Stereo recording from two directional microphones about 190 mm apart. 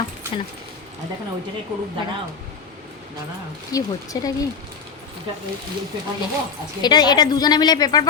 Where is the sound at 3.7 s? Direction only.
20° left (ahead or behind).